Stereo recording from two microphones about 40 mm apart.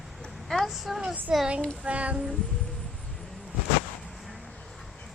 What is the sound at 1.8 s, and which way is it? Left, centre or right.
Child singing, right.